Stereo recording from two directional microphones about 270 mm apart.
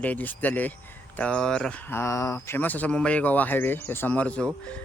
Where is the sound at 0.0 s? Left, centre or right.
Centre.